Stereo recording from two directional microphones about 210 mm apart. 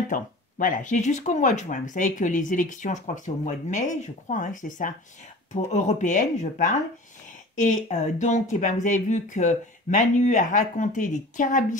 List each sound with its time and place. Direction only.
0.1 s speech: 40° left (ahead or behind)